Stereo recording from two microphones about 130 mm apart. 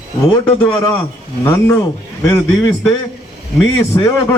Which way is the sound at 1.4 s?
15° left (ahead or behind).